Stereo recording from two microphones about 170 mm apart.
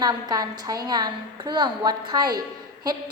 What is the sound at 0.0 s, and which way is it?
A woman's voice, 25° right (ahead or behind).